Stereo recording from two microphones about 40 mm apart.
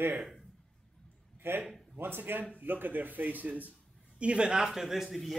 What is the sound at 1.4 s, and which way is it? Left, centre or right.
Speech, right.